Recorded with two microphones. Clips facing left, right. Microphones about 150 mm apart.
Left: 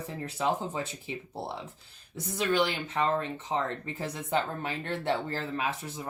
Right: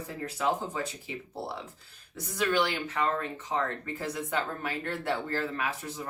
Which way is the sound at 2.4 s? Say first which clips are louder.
Even; 25° left (ahead or behind).